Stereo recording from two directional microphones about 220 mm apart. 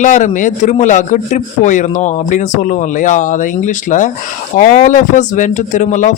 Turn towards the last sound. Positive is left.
turn(degrees=35)  # may be behind; listen again after turning